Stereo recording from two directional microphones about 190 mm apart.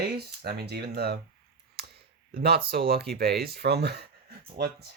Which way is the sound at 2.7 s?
55° right (ahead or behind).